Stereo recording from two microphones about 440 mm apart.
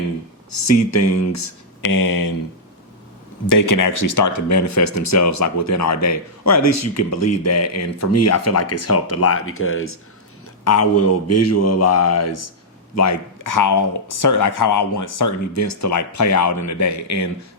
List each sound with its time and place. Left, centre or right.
0.6 s speech: left
3.5 s speech: left